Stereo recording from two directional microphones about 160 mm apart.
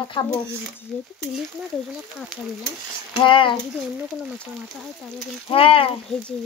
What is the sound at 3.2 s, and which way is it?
Speech, 30° left (ahead or behind).